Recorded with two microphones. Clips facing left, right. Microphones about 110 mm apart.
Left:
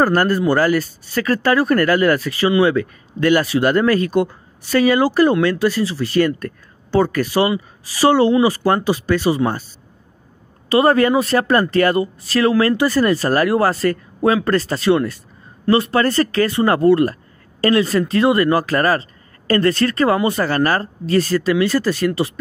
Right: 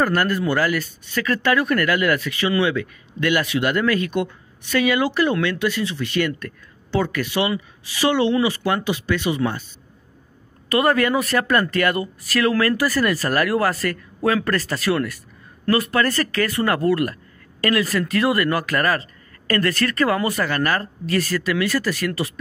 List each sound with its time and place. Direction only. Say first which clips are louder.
0.0 s speech: left 5 dB; 35° left (ahead or behind)
10.7 s speech: left 5 dB; 30° left (ahead or behind)